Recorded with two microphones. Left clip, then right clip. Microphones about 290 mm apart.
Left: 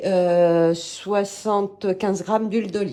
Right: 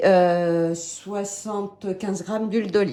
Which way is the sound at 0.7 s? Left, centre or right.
Left.